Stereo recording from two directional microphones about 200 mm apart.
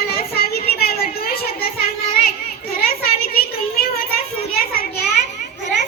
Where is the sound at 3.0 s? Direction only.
50° left (ahead or behind).